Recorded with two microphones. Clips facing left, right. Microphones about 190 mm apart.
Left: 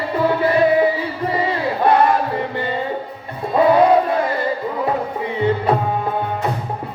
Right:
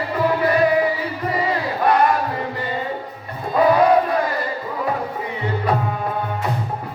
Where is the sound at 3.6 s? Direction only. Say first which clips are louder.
Left 2 dB; 25° left (ahead or behind).